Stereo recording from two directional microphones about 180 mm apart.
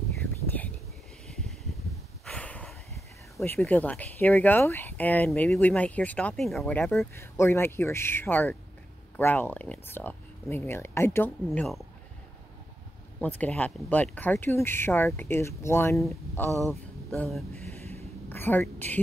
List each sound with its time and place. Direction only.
0.5 s whispering: 10° left (ahead or behind)
1.2 s a sound: centre (ahead or behind)
3.4 s speech: 10° left (ahead or behind)
13.2 s speech: 10° left (ahead or behind)
16.4 s speech: 15° right (ahead or behind)
17.2 s speech: centre (ahead or behind)
18.3 s a woman's voice: 10° left (ahead or behind)